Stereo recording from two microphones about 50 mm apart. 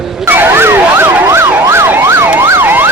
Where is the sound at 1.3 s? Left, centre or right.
Right.